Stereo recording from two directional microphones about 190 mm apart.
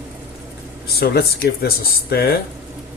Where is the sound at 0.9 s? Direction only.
55° left (ahead or behind).